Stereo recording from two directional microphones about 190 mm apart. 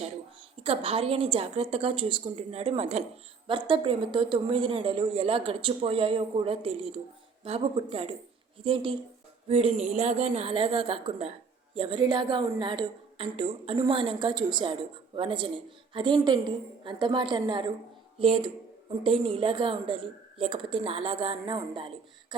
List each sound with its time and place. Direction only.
0.6 s a woman's voice: 30° right (ahead or behind)